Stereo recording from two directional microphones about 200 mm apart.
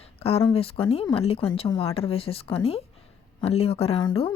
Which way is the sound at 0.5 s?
30° left (ahead or behind).